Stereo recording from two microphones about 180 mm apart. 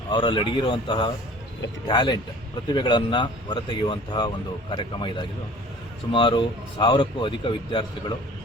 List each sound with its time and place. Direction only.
0.1 s speech: 25° left (ahead or behind)